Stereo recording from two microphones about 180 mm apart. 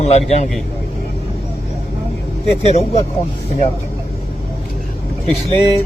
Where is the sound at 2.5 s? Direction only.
35° left (ahead or behind).